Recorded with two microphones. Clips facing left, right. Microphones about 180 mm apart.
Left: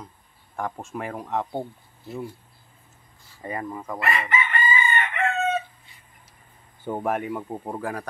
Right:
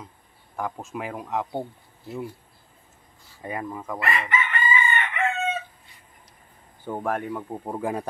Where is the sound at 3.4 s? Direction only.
Centre (ahead or behind).